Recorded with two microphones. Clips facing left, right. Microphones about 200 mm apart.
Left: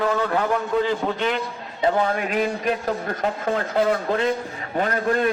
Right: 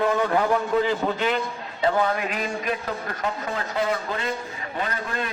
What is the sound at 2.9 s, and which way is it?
A man's voice, 50° left (ahead or behind).